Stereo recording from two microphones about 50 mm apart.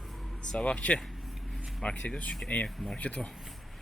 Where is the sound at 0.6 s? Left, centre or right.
Left.